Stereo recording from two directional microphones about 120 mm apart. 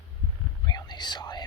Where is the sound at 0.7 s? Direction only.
35° left (ahead or behind).